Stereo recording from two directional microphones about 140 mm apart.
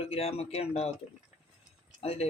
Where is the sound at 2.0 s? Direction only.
45° left (ahead or behind).